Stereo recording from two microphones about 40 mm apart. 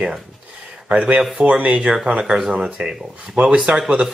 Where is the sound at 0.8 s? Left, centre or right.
Right.